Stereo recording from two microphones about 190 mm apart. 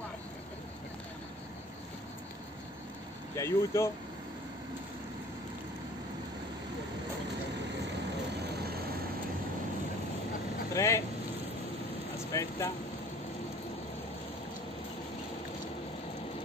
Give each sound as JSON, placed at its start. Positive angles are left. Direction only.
{"t": 3.3, "sound": "speech", "side_deg": 15}
{"t": 10.7, "sound": "vehicle", "side_deg": 15}
{"t": 12.2, "sound": "vehicle", "side_deg": 15}